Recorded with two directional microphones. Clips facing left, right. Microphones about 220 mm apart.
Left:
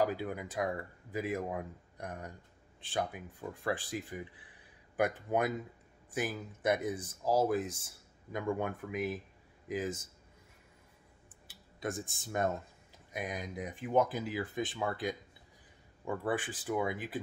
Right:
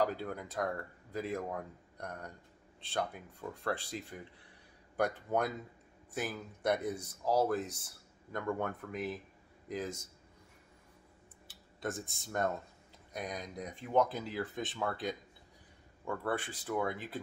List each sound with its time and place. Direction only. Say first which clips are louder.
0.0 s speech: left 1 dB; 10° left (ahead or behind)
6.6 s speech: left 1 dB; centre (ahead or behind)
8.3 s a man's voice: left 2 dB; 10° left (ahead or behind)
11.8 s speech: left 1 dB; centre (ahead or behind)
16.1 s speech: left 2 dB; 15° left (ahead or behind)